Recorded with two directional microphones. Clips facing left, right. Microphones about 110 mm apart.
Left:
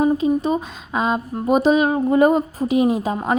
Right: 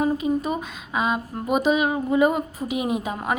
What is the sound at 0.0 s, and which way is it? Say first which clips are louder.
A woman's voice: left 5 dB; 30° left (ahead or behind).